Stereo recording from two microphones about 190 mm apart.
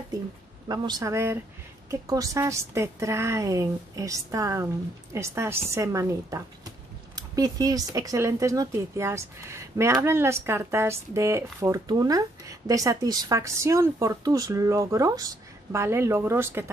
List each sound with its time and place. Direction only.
0.7 s speech: 20° right (ahead or behind)